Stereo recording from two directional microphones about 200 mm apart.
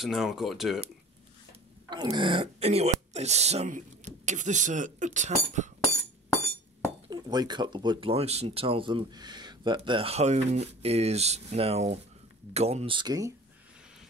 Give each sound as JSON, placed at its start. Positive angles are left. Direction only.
{"t": 0.0, "sound": "speech", "side_deg": 0}
{"t": 1.9, "sound": "speech", "side_deg": -25}
{"t": 7.1, "sound": "speech", "side_deg": -20}